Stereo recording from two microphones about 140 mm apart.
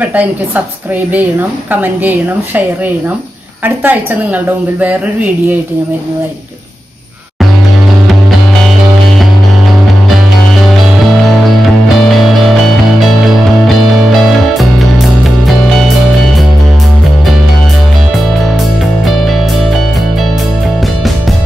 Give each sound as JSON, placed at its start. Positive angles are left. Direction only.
{"t": 1.7, "sound": "a woman's voice", "side_deg": -15}
{"t": 3.6, "sound": "a woman's voice", "side_deg": -10}